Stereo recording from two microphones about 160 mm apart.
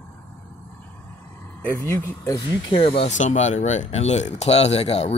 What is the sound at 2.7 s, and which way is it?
Speech, 35° left (ahead or behind).